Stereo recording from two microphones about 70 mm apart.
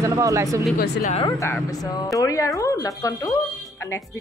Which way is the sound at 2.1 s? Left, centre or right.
Left.